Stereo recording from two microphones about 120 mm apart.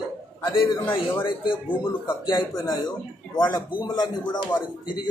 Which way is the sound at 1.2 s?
45° left (ahead or behind).